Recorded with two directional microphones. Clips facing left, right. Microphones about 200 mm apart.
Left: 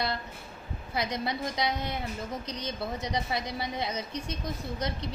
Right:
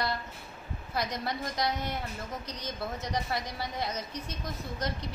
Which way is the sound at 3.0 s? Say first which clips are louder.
Left 1 dB; 15° left (ahead or behind).